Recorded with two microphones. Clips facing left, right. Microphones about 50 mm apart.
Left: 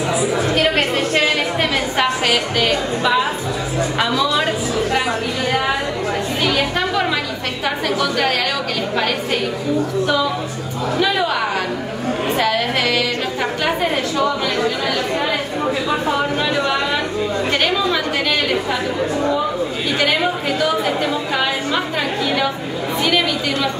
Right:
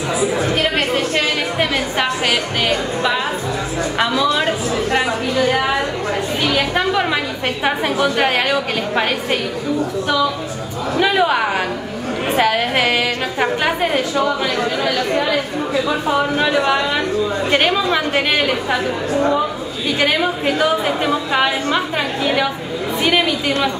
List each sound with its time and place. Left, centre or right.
1.6 s a sound: centre
4.0 s speech: centre
6.5 s chatter: right
7.6 s a woman's voice: right
11.0 s a woman's voice: right
16.1 s a woman's voice: centre
20.2 s a woman's voice: right
23.0 s a woman's voice: right